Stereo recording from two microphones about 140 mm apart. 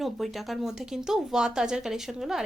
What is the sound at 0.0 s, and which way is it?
A woman's voice, centre (ahead or behind).